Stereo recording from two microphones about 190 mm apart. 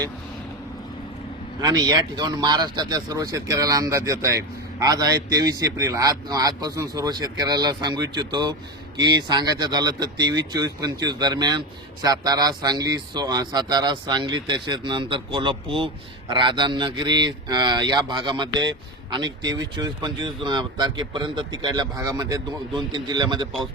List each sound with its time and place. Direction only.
1.6 s speech: 20° right (ahead or behind)